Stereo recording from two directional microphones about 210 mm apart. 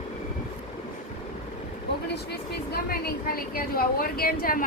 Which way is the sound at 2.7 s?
45° left (ahead or behind).